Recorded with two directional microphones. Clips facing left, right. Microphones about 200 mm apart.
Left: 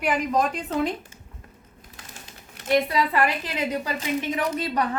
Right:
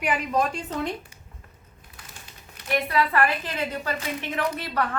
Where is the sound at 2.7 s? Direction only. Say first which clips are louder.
Left 2 dB; 15° left (ahead or behind).